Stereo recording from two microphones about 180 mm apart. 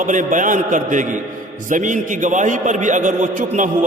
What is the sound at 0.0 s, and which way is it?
A man's voice, 45° right (ahead or behind).